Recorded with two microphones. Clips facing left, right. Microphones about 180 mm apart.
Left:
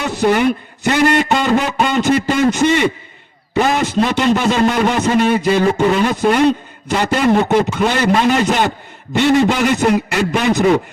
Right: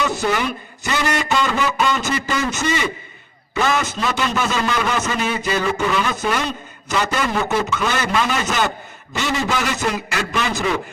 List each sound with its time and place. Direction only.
0.3 s a man's voice: 55° left (ahead or behind)
3.5 s a man's voice: 35° left (ahead or behind)
3.8 s a man's voice: 60° left (ahead or behind); by 5.1 s 40° left (ahead or behind)
5.1 s a man's voice: 60° left (ahead or behind)
5.6 s a man's voice: 45° left (ahead or behind)
7.6 s a man's voice: 45° left (ahead or behind); by 10.6 s 60° left (ahead or behind)